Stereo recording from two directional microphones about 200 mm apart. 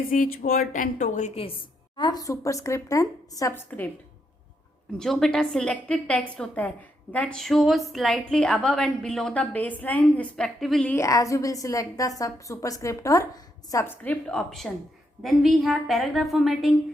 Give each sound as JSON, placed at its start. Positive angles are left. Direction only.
{"t": 0.1, "sound": "a woman's voice", "side_deg": 40}
{"t": 2.0, "sound": "a woman's voice", "side_deg": 20}
{"t": 4.9, "sound": "a woman's voice", "side_deg": 0}